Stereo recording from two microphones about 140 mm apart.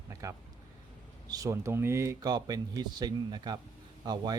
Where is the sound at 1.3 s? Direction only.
25° right (ahead or behind).